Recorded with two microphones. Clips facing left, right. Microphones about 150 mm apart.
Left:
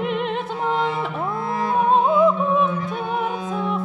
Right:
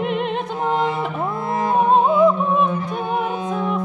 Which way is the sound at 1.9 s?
Centre (ahead or behind).